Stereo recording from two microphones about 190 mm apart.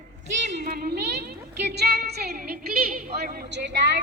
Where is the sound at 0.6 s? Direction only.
50° right (ahead or behind).